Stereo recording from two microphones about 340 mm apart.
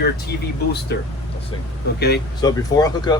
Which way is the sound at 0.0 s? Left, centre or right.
Left.